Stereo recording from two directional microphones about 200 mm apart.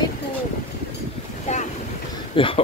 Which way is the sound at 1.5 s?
35° left (ahead or behind).